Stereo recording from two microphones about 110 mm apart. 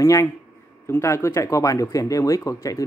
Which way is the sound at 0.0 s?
30° left (ahead or behind).